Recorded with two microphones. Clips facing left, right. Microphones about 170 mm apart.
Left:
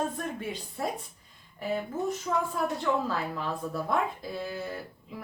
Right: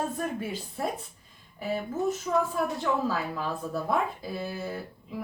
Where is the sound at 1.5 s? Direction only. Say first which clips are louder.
Right 1 dB; 5° right (ahead or behind).